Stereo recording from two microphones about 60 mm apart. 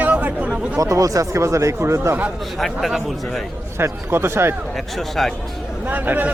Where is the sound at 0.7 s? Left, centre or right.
Right.